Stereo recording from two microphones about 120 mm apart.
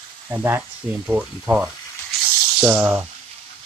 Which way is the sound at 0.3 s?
15° right (ahead or behind).